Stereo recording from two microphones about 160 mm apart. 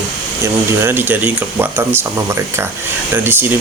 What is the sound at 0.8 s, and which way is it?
Speech, 15° right (ahead or behind).